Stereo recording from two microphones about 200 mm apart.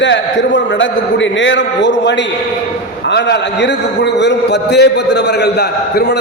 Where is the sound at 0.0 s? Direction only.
65° left (ahead or behind).